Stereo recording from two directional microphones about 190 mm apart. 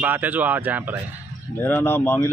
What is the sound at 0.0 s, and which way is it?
Speech, 10° right (ahead or behind).